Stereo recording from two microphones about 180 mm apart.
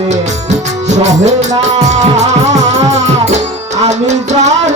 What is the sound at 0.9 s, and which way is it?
Music, 40° right (ahead or behind).